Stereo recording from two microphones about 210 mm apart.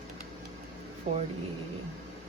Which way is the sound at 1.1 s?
35° right (ahead or behind).